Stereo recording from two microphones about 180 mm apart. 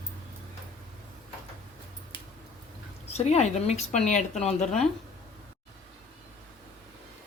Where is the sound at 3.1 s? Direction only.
40° left (ahead or behind).